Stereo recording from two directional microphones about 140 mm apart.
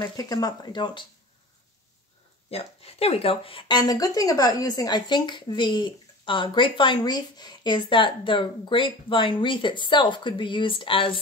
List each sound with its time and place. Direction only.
0.0 s speech: 25° left (ahead or behind)
2.5 s speech: 45° left (ahead or behind)